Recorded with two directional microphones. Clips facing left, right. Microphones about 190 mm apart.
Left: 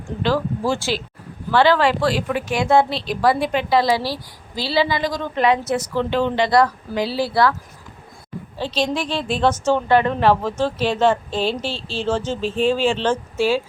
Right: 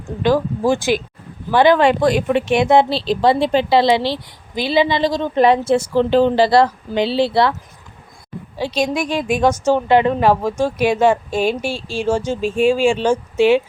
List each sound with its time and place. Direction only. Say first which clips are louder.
0.2 s a woman's voice: right 5 dB; 15° right (ahead or behind)
8.5 s a woman's voice: right 3 dB; 10° right (ahead or behind)